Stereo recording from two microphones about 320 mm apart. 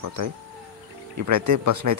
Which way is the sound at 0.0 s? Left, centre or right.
Right.